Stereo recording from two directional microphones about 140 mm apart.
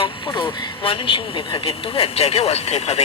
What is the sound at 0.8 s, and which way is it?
Speech, 35° left (ahead or behind).